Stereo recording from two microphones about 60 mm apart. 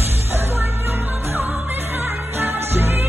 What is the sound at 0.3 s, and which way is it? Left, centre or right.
Music, right.